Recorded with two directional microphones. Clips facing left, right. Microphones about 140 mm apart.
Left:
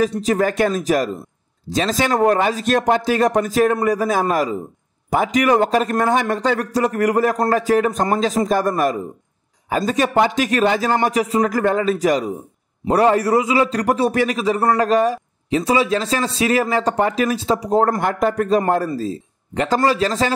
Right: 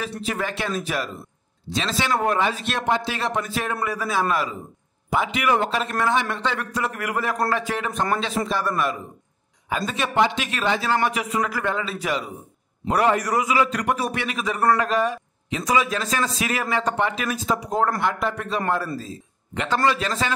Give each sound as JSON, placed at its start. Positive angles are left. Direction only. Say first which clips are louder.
{"t": 0.2, "sound": "a man's voice", "louder": "left 10 dB", "side_deg": 40}